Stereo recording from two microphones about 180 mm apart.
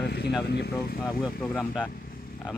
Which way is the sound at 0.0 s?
65° left (ahead or behind).